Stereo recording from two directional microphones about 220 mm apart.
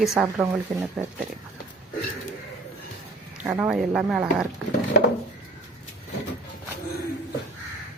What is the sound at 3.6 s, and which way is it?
Speech, 5° right (ahead or behind).